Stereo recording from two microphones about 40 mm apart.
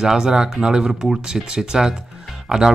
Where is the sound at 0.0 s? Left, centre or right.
Centre.